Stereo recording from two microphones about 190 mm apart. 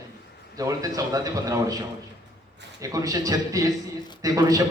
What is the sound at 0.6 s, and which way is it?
A man's voice, 20° right (ahead or behind).